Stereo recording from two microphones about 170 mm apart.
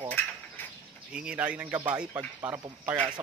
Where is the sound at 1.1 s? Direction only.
5° right (ahead or behind).